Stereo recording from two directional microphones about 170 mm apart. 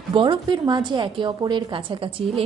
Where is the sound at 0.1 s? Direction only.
30° right (ahead or behind).